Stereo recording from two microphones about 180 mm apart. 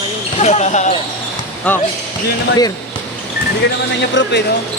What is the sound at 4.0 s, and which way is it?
Speech, 80° left.